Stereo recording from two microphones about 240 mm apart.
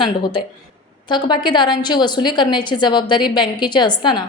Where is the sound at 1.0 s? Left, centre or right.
Centre.